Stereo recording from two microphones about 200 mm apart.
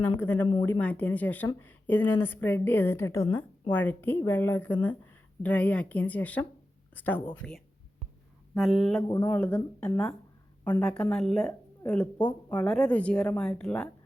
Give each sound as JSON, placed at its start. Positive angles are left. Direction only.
{"t": 0.0, "sound": "a woman's voice", "side_deg": 10}
{"t": 9.0, "sound": "speech", "side_deg": 20}
{"t": 9.8, "sound": "speech", "side_deg": 5}
{"t": 10.6, "sound": "speech", "side_deg": 15}
{"t": 10.8, "sound": "speech", "side_deg": 5}